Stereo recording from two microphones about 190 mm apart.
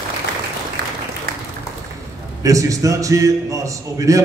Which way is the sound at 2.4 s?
15° right (ahead or behind).